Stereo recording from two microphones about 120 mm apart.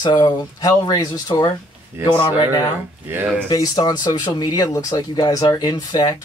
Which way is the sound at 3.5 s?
30° left (ahead or behind).